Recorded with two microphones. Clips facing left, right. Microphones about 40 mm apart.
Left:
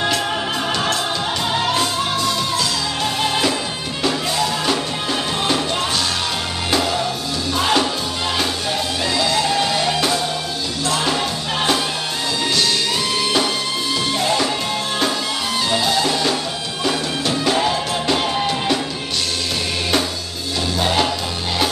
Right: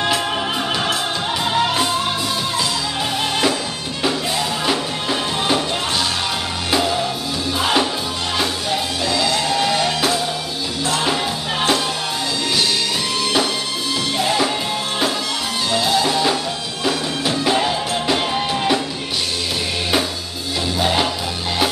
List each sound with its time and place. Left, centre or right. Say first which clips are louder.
1.6 s music: right 2 dB; centre
7.5 s music: left 1 dB; centre
9.0 s music: even; centre
9.6 s music: even; centre
14.1 s music: right 1 dB; centre
15.8 s music: right 4 dB; centre
20.8 s music: even; centre